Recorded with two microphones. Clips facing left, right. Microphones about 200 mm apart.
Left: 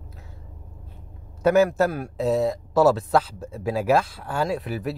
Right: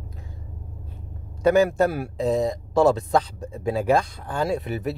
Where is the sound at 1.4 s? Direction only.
5° left (ahead or behind).